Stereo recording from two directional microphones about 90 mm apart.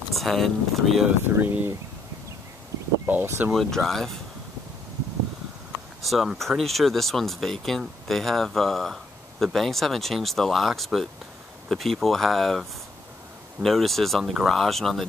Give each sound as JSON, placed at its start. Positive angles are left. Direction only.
{"t": 0.1, "sound": "speech", "side_deg": 0}
{"t": 1.2, "sound": "speech", "side_deg": -25}
{"t": 3.1, "sound": "speech", "side_deg": -25}
{"t": 3.5, "sound": "speech", "side_deg": 5}
{"t": 6.0, "sound": "speech", "side_deg": 0}